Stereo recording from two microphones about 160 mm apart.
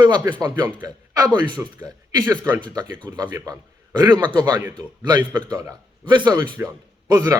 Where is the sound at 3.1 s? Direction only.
20° right (ahead or behind).